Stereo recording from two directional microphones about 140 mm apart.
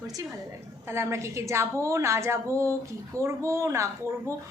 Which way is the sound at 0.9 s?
20° right (ahead or behind).